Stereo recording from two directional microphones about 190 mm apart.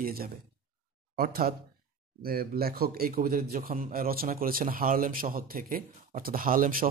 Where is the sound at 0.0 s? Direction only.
50° right (ahead or behind).